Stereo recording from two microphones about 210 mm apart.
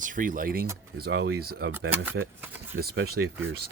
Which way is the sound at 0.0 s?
40° right (ahead or behind).